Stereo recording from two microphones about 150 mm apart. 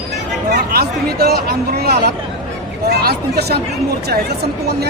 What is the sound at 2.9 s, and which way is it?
Hubbub, 90° right.